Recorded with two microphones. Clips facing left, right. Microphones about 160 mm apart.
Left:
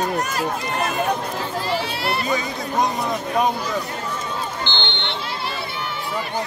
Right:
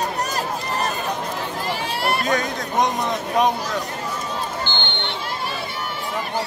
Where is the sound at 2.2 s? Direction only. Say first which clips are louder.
Right 1 dB; 5° left (ahead or behind).